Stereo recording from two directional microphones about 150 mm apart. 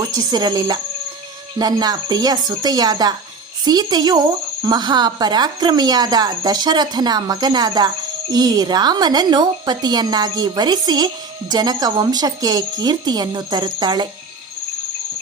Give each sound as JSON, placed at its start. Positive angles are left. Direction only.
{"t": 0.0, "sound": "a woman's voice", "side_deg": -25}